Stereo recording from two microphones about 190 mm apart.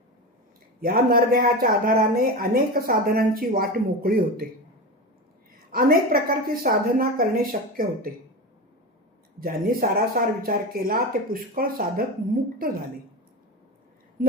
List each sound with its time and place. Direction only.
0.8 s speech: 50° right (ahead or behind)
5.7 s speech: 50° right (ahead or behind)
9.4 s speech: 50° right (ahead or behind)